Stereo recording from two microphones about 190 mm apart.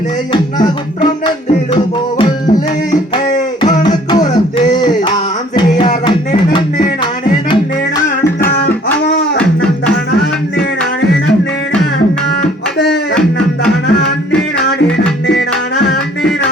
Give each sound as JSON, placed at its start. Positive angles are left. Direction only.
{"t": 0.3, "sound": "music", "side_deg": 25}
{"t": 15.8, "sound": "music", "side_deg": 55}